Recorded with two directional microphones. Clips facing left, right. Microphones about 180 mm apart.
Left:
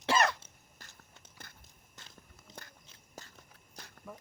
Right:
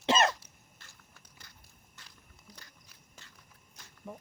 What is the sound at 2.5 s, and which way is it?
Biting, 20° left (ahead or behind).